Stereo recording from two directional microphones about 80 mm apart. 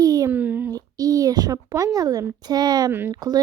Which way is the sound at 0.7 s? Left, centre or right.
Right.